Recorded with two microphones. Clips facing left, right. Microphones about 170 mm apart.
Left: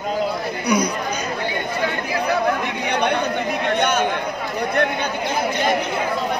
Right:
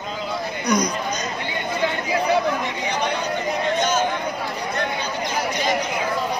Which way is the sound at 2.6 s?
60° left (ahead or behind).